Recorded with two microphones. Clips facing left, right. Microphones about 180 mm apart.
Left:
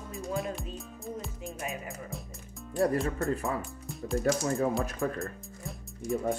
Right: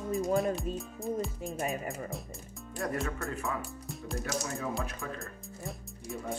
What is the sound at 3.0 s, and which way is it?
Speech, 35° left (ahead or behind).